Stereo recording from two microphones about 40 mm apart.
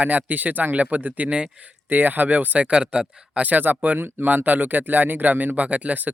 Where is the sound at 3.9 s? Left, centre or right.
Right.